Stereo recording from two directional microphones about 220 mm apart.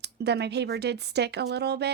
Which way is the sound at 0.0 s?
50° right (ahead or behind).